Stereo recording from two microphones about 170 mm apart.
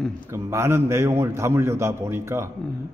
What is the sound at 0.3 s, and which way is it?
A man's voice, 15° right (ahead or behind).